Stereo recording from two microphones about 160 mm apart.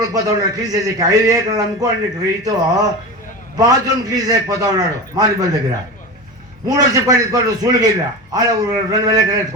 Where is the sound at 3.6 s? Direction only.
25° right (ahead or behind).